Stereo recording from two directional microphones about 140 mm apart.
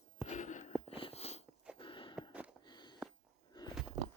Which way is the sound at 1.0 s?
45° left (ahead or behind).